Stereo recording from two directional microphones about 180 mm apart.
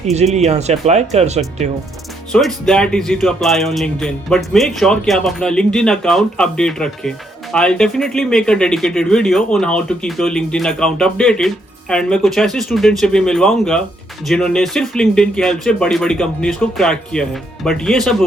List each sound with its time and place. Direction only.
0.0 s speech: 40° right (ahead or behind)
2.3 s speech: 5° left (ahead or behind)